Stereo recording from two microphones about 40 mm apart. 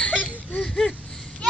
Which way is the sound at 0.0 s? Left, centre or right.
Left.